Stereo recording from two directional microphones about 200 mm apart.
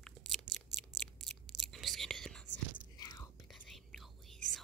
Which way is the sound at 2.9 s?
20° left (ahead or behind).